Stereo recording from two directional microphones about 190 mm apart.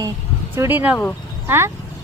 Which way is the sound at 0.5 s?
10° right (ahead or behind).